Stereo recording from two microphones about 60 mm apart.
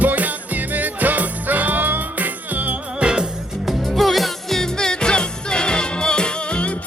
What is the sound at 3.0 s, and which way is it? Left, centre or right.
Music, centre.